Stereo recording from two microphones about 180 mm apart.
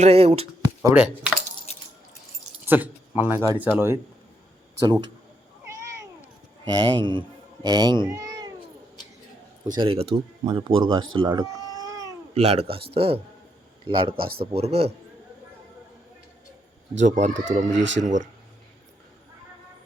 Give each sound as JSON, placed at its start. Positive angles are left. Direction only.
{"t": 0.0, "sound": "speech", "side_deg": -35}
{"t": 0.8, "sound": "speech", "side_deg": -10}
{"t": 2.6, "sound": "speech", "side_deg": -10}
{"t": 4.8, "sound": "speech", "side_deg": -25}
{"t": 6.7, "sound": "a man's voice", "side_deg": -25}
{"t": 8.1, "sound": "cat", "side_deg": -20}
{"t": 9.7, "sound": "speech", "side_deg": -30}
{"t": 11.2, "sound": "cat", "side_deg": -20}
{"t": 12.3, "sound": "speech", "side_deg": -35}
{"t": 17.0, "sound": "speech", "side_deg": -40}